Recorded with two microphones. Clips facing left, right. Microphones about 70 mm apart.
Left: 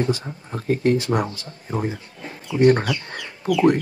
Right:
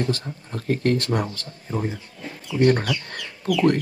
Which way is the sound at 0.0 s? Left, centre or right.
Centre.